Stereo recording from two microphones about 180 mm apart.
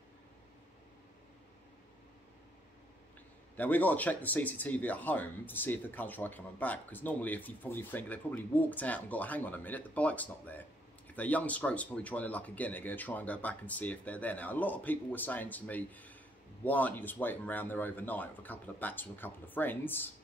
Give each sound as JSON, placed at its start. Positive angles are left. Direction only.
{"t": 3.5, "sound": "speech", "side_deg": 10}